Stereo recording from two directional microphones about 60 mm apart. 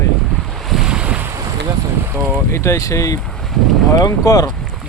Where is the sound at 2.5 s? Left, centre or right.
Left.